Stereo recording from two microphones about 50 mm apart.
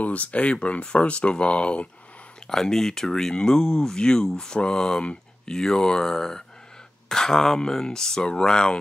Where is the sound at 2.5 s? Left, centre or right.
Centre.